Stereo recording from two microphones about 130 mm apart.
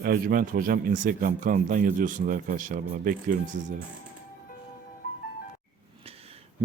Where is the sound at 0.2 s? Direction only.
90° right.